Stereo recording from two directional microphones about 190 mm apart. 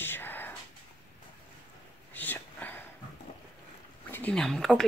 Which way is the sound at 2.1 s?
10° left (ahead or behind).